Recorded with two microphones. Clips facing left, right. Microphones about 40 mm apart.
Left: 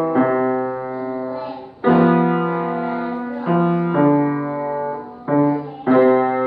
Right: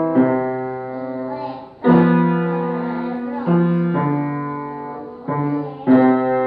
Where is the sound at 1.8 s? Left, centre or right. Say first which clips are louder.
Even; centre.